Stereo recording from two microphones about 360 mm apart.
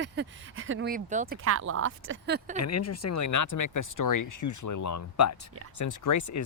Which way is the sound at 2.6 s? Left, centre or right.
Left.